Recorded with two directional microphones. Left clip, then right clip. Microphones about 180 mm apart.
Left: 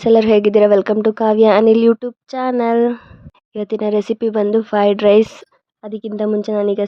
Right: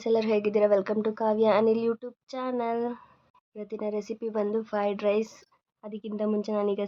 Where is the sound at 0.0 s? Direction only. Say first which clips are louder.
Left 14 dB; 45° left (ahead or behind).